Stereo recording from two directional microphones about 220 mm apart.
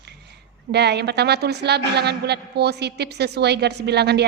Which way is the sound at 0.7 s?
50° right (ahead or behind).